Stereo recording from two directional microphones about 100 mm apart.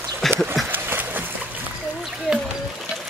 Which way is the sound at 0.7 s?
20° right (ahead or behind).